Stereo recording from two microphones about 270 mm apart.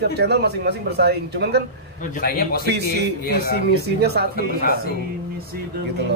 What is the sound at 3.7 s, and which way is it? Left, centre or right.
Speech, right.